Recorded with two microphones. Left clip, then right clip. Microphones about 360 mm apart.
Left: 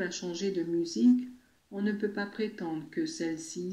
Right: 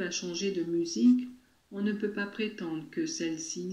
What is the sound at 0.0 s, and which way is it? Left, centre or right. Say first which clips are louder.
Speech: right 1 dB; centre.